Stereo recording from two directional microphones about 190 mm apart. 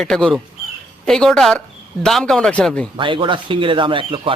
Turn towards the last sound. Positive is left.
turn(degrees=-25)  # may be behind; listen again after turning